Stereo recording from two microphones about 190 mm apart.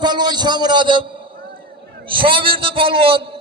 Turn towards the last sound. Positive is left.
turn(degrees=-30)  # may be behind; listen again after turning